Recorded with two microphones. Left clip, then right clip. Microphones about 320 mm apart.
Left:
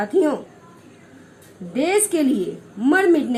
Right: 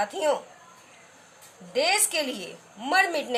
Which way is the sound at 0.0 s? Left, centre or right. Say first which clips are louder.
Left 6 dB; right.